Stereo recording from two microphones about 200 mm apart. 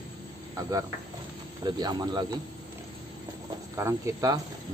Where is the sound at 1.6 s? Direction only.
20° right (ahead or behind).